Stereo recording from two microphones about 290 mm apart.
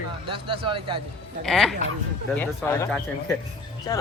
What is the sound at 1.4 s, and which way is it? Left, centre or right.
A man's voice, centre.